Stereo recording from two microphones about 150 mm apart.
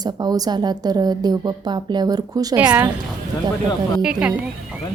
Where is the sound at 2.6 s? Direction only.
10° right (ahead or behind).